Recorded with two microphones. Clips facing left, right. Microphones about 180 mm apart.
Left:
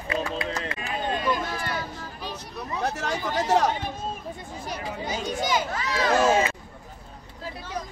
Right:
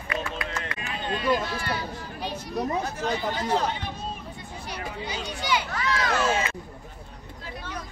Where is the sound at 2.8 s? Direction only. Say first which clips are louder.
Left 2 dB; 75° left (ahead or behind).